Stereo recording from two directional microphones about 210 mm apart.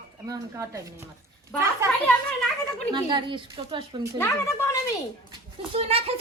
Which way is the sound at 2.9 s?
20° right (ahead or behind).